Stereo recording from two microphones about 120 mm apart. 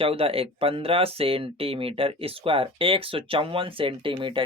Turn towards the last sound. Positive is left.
turn(degrees=-45)  # may be behind; listen again after turning